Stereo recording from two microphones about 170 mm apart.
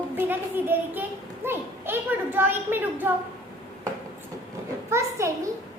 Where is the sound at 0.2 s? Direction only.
10° right (ahead or behind).